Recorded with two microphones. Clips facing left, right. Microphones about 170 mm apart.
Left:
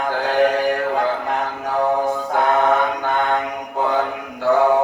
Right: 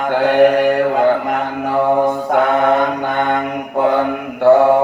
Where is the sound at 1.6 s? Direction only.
60° right (ahead or behind).